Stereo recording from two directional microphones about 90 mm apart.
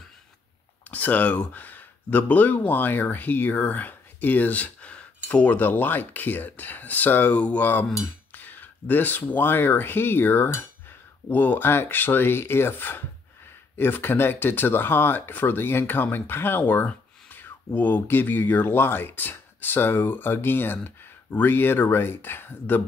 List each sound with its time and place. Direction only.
0.8 s speech: 20° left (ahead or behind)